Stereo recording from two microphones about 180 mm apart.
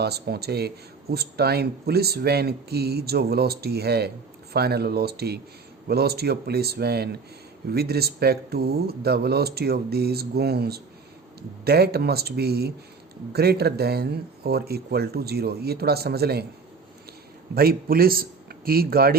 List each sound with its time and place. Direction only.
0.0 s speech: 65° right (ahead or behind)
17.5 s a man's voice: 60° right (ahead or behind)